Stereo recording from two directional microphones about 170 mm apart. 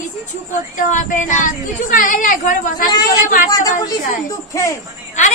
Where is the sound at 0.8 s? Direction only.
50° left (ahead or behind).